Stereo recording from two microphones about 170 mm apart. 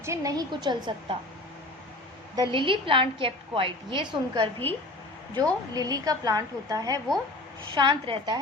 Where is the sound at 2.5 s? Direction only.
30° right (ahead or behind).